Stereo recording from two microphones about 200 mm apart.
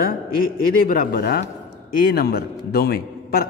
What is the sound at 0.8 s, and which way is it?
Speech, 50° left (ahead or behind).